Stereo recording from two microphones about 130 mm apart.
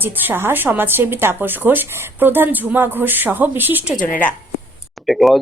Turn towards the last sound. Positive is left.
turn(degrees=0)  # may be behind; listen again after turning